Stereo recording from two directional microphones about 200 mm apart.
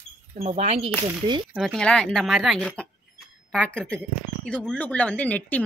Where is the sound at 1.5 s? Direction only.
Centre (ahead or behind).